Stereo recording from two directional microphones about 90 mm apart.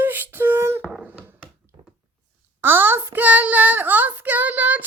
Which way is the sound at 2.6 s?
25° right (ahead or behind).